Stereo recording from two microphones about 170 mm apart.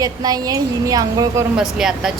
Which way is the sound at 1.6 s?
5° right (ahead or behind).